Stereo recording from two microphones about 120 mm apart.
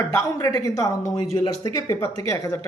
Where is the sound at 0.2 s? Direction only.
25° left (ahead or behind).